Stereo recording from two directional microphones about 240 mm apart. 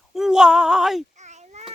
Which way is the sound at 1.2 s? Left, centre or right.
Right.